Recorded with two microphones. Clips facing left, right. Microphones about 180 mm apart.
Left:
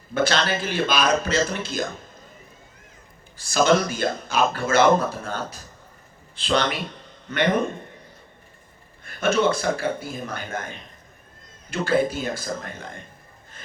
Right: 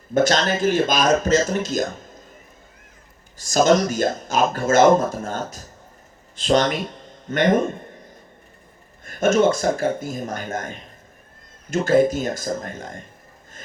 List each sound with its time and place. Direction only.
0.1 s speech: 45° right (ahead or behind)
3.3 s speech: 45° right (ahead or behind)
9.0 s speech: 45° right (ahead or behind)